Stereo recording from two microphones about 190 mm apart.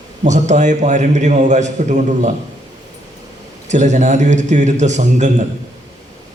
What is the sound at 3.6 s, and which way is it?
A man's voice, 40° right (ahead or behind).